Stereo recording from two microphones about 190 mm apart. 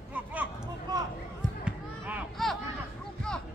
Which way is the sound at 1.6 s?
5° right (ahead or behind).